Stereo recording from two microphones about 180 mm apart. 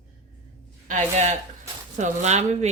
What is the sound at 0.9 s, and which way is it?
A woman's voice, 40° right (ahead or behind).